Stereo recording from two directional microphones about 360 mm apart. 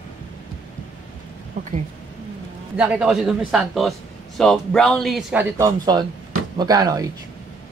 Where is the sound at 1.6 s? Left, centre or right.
Right.